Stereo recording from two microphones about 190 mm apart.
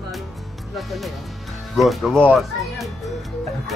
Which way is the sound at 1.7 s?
Centre (ahead or behind).